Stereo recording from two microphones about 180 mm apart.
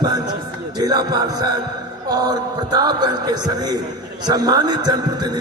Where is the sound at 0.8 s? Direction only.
20° right (ahead or behind).